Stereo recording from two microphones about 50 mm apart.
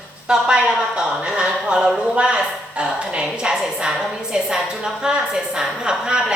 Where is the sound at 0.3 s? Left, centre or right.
Centre.